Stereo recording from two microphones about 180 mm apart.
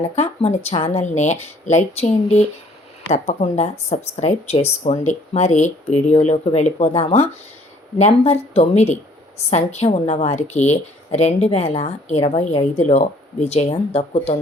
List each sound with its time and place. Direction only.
0.2 s a woman's voice: 35° left (ahead or behind)